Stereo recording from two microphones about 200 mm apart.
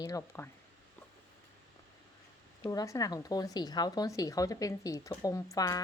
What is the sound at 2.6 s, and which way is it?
Speech, 15° left (ahead or behind).